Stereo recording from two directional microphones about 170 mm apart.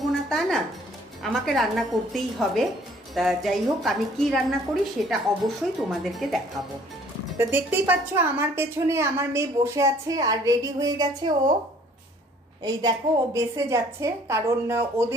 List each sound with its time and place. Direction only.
0.0 s music: centre (ahead or behind)
1.2 s a woman's voice: centre (ahead or behind)
7.3 s a woman's voice: 10° right (ahead or behind)
12.6 s a woman's voice: 20° right (ahead or behind)